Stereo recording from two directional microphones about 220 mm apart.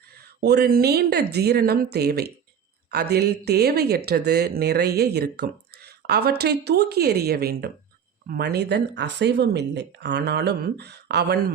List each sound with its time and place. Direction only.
0.3 s speech: 45° right (ahead or behind)